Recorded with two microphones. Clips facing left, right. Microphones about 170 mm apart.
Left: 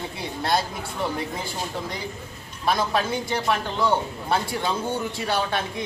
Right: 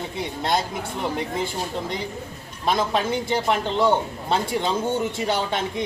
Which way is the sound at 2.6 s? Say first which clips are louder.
Right 1 dB; 25° right (ahead or behind).